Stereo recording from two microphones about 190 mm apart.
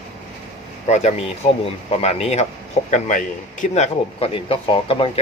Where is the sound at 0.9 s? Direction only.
35° left (ahead or behind).